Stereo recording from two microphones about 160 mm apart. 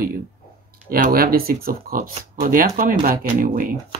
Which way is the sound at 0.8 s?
65° right (ahead or behind).